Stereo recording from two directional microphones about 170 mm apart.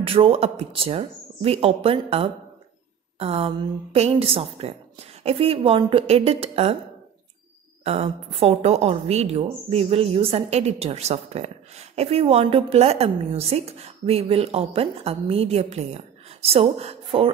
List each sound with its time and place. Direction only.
0.0 s a woman's voice: 35° right (ahead or behind)
7.8 s a woman's voice: 35° right (ahead or behind)